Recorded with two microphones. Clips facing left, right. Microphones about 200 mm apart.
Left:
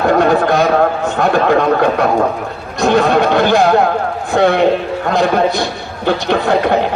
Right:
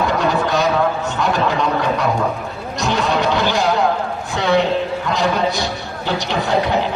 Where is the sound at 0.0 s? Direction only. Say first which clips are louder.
Left 6 dB; 55° left (ahead or behind).